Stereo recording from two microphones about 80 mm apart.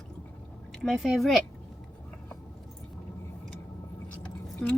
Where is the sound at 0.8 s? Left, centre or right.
Centre.